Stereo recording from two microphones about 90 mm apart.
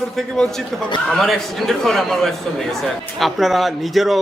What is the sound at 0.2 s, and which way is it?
A man's voice, 5° left (ahead or behind).